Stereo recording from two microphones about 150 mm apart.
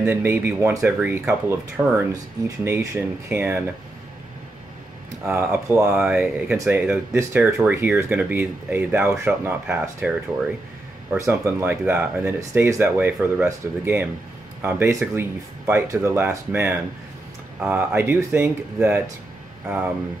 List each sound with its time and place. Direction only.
0.0 s speech: 15° right (ahead or behind)
5.3 s speech: 15° right (ahead or behind)
5.9 s speech: 5° right (ahead or behind)
6.5 s speech: 15° right (ahead or behind)